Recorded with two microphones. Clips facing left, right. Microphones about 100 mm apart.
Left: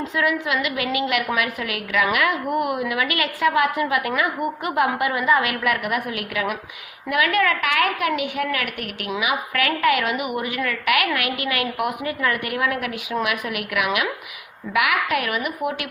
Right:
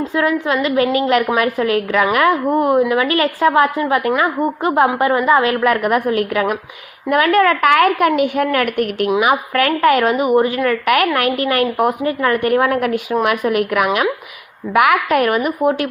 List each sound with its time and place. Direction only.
0.1 s a woman's voice: 30° right (ahead or behind)